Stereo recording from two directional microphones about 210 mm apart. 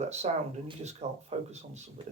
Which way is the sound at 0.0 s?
30° right (ahead or behind).